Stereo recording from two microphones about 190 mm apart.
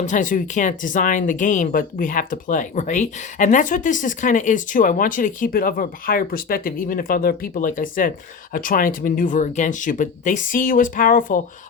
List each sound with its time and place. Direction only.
0.0 s speech: 40° left (ahead or behind)